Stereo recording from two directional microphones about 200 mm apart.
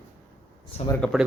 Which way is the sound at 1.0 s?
5° left (ahead or behind).